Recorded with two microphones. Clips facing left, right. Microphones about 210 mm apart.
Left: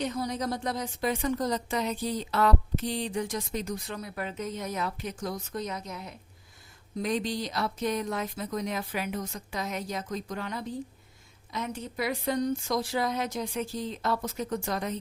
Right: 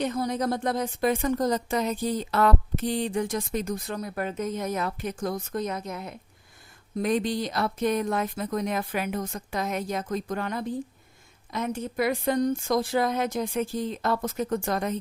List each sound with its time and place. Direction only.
0.0 s a woman's voice: 55° right (ahead or behind)